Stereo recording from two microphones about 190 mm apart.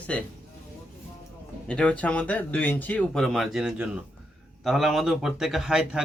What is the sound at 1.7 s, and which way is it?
Speech, 5° left (ahead or behind).